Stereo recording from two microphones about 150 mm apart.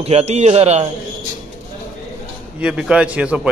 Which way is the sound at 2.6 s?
5° right (ahead or behind).